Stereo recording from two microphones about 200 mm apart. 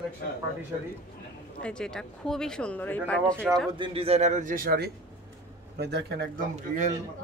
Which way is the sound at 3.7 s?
25° right (ahead or behind).